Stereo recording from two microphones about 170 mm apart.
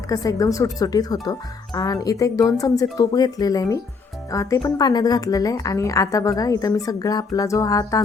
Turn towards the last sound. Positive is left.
turn(degrees=20)  # may be behind; listen again after turning